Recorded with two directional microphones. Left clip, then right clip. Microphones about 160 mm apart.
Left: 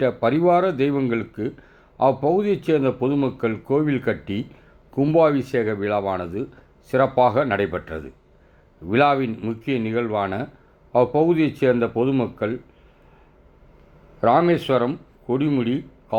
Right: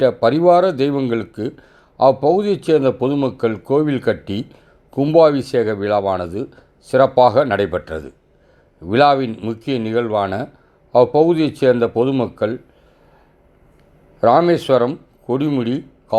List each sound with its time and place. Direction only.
0.0 s speech: 25° right (ahead or behind)
14.2 s speech: 30° right (ahead or behind)